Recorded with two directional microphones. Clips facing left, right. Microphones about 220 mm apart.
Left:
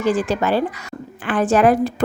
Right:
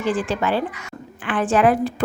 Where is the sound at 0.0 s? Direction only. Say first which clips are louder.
Left 3 dB; 40° left (ahead or behind).